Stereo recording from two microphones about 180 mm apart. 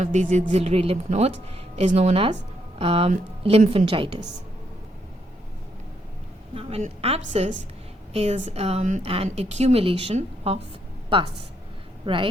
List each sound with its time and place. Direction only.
0.0 s speech: 40° right (ahead or behind)
6.5 s speech: 35° right (ahead or behind)
12.0 s speech: 30° right (ahead or behind)